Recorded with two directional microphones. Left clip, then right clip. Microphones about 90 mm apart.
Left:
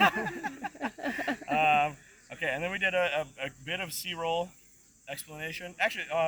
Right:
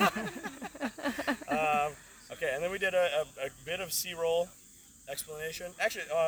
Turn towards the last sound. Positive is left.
turn(degrees=-35)  # may be behind; listen again after turning